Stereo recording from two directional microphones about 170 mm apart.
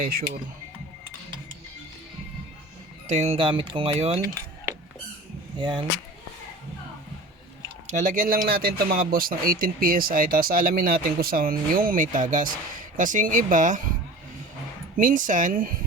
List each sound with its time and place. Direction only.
0.0 s speech: 60° right (ahead or behind)
3.1 s speech: 40° right (ahead or behind)
5.5 s speech: 30° right (ahead or behind)
7.9 s speech: 45° right (ahead or behind)
14.9 s speech: 50° right (ahead or behind)